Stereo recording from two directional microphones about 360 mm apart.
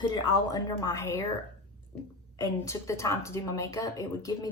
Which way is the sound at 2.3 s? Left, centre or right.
Centre.